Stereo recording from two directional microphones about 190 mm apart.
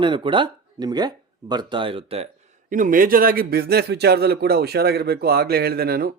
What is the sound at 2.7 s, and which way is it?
A man's voice, 45° right (ahead or behind).